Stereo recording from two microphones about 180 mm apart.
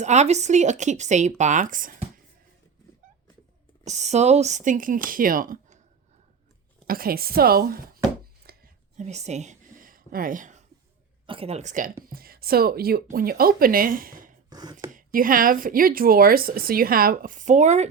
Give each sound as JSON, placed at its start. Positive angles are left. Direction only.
{"t": 0.0, "sound": "speech", "side_deg": -40}
{"t": 3.8, "sound": "speech", "side_deg": -40}
{"t": 6.8, "sound": "a woman's voice", "side_deg": -55}
{"t": 8.4, "sound": "a sound", "side_deg": -60}
{"t": 9.0, "sound": "a sound", "side_deg": -40}
{"t": 11.3, "sound": "speech", "side_deg": -35}
{"t": 12.0, "sound": "speech", "side_deg": -55}
{"t": 14.5, "sound": "speech", "side_deg": -25}
{"t": 14.9, "sound": "speech", "side_deg": -50}